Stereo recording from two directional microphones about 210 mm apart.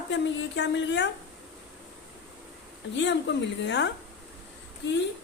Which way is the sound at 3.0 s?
55° left (ahead or behind).